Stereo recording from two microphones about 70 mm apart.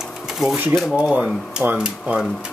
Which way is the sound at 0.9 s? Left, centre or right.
Centre.